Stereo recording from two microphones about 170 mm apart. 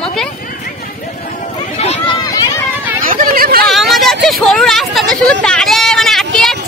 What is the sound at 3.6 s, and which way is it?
Speech, centre (ahead or behind).